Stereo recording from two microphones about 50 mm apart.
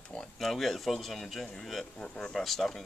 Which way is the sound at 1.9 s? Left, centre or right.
Centre.